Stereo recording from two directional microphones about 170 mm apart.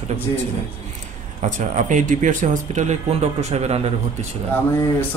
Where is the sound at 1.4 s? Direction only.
45° right (ahead or behind).